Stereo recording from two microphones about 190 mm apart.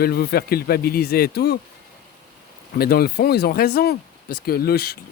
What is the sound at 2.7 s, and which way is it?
Speech, 55° left (ahead or behind).